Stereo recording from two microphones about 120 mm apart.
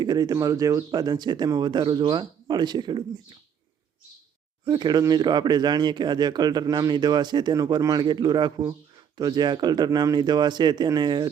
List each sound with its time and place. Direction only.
0.0 s speech: 35° right (ahead or behind)
4.6 s speech: 35° right (ahead or behind)